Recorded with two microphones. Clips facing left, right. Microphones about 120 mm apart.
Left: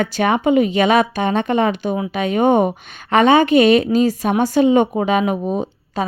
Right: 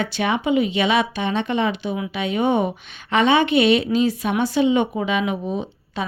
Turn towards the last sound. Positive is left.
turn(degrees=45)  # may be behind; listen again after turning